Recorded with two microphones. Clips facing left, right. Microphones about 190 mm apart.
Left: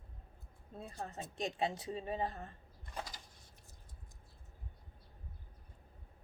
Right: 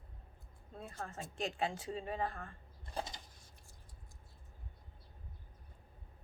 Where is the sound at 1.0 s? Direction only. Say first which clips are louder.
Even; 20° left (ahead or behind).